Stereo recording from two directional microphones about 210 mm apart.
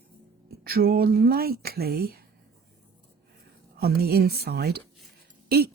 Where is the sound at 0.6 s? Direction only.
45° right (ahead or behind).